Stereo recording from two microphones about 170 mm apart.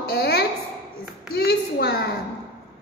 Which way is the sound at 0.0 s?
70° left (ahead or behind).